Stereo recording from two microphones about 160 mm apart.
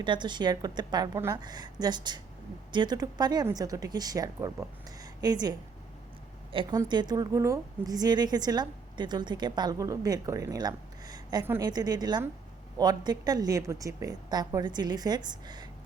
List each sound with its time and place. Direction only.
0.0 s a woman's voice: 30° right (ahead or behind)